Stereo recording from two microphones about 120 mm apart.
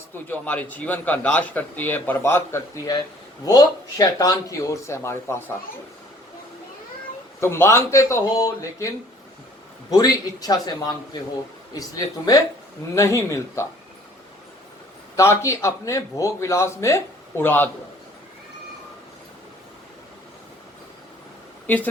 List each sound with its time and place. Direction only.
0.1 s a man's voice: 15° left (ahead or behind)
7.3 s a man's voice: 20° left (ahead or behind)
9.9 s a man's voice: 30° left (ahead or behind)
15.1 s a man's voice: 25° left (ahead or behind)